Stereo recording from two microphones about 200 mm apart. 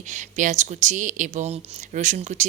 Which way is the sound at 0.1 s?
40° right (ahead or behind).